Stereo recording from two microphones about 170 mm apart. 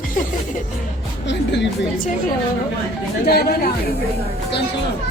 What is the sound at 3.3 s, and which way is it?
Speech, 65° left (ahead or behind).